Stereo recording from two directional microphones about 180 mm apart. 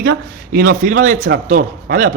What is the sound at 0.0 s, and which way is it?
Speech, 55° right (ahead or behind).